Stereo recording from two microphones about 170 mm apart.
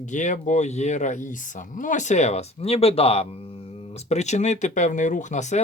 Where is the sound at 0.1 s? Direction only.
45° left (ahead or behind).